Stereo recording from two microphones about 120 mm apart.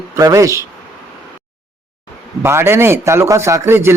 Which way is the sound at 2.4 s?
20° right (ahead or behind).